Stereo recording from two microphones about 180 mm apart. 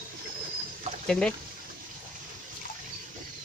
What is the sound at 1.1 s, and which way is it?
Speech, 5° left (ahead or behind).